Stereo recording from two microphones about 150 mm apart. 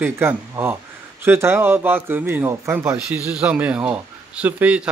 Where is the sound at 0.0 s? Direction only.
15° right (ahead or behind).